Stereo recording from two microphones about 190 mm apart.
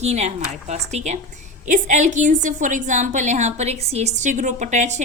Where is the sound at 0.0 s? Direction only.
35° right (ahead or behind).